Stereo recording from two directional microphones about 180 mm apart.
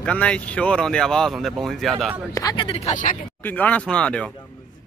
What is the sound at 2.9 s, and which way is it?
Speech, 45° left (ahead or behind).